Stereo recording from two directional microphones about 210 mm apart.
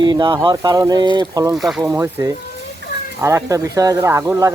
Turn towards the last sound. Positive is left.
turn(degrees=-15)  # may be behind; listen again after turning